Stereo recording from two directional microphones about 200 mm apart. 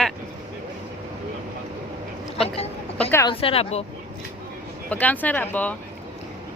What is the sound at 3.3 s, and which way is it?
Speech, 30° left (ahead or behind).